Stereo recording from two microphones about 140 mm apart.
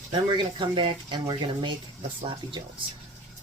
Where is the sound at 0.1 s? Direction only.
35° right (ahead or behind).